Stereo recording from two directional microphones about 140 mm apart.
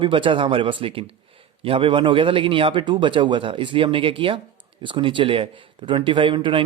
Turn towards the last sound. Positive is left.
turn(degrees=-35)  # may be behind; listen again after turning